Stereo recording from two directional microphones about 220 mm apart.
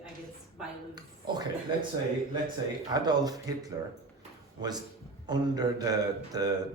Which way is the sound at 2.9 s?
15° right (ahead or behind).